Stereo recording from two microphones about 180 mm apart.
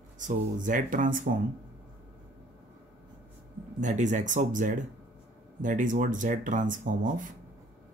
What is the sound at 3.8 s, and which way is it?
Speech, 40° right (ahead or behind).